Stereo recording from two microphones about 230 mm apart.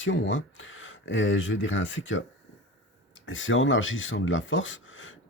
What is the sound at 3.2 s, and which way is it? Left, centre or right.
Speech, left.